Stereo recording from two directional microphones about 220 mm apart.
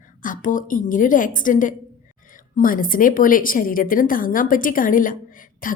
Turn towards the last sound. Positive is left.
turn(degrees=40)  # may be behind; listen again after turning